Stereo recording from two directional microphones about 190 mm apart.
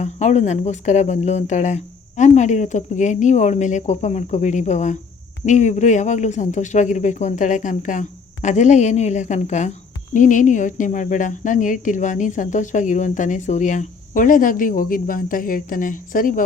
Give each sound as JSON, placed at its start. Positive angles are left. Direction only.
{"t": 0.0, "sound": "speech", "side_deg": 35}